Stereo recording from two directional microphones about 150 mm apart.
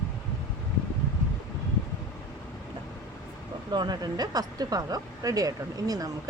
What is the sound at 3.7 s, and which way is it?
Speech, 30° right (ahead or behind).